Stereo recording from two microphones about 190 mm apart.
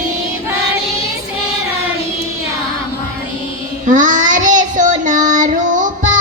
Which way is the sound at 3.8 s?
40° right (ahead or behind).